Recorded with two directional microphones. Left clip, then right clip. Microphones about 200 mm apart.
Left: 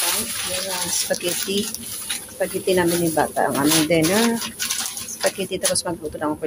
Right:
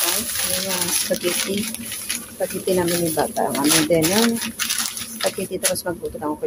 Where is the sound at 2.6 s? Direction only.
5° right (ahead or behind).